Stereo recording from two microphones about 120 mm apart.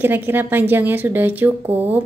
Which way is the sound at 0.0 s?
15° right (ahead or behind).